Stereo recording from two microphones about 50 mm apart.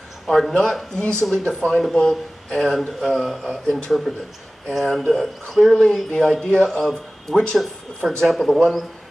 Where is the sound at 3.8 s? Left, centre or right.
Centre.